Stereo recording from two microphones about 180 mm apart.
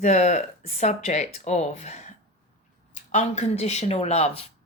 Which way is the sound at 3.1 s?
40° left (ahead or behind).